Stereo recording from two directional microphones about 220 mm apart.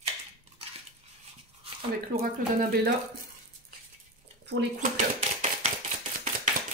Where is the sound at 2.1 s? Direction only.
45° right (ahead or behind).